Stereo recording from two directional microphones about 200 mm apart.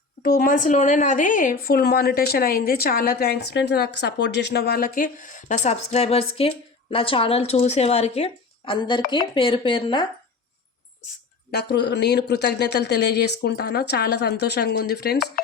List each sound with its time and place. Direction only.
0.2 s a woman's voice: 45° left (ahead or behind); by 10.1 s 25° left (ahead or behind)
11.5 s speech: 55° left (ahead or behind)